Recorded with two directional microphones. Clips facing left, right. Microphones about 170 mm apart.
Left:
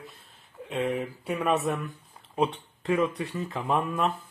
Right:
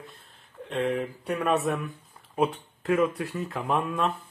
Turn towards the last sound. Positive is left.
turn(degrees=0)  # may be behind; listen again after turning